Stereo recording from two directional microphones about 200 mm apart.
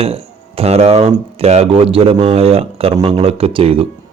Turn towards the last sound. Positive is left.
turn(degrees=-25)  # may be behind; listen again after turning